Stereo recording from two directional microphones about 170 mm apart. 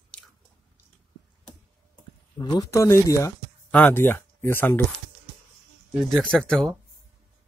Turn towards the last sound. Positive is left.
turn(degrees=5)  # may be behind; listen again after turning